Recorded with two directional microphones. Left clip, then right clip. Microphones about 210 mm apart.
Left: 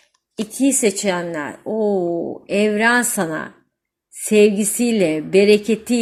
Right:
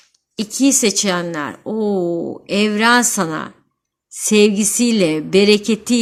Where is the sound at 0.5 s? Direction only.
40° right (ahead or behind).